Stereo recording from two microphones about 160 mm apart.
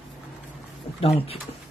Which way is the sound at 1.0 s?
35° left (ahead or behind).